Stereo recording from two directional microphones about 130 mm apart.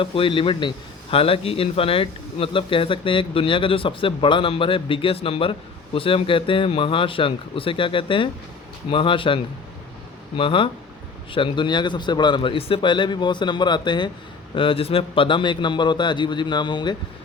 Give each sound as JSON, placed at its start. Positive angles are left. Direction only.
{"t": 0.0, "sound": "a man's voice", "side_deg": 40}